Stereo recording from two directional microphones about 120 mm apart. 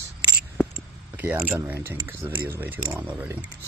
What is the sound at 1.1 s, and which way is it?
Speech, 15° right (ahead or behind).